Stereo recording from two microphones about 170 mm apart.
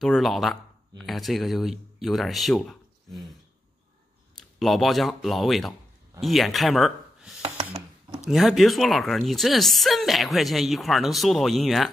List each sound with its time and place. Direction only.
0.0 s speech: centre (ahead or behind)
4.6 s a man's voice: centre (ahead or behind)
7.4 s a sound: 35° right (ahead or behind)
8.3 s speech: centre (ahead or behind)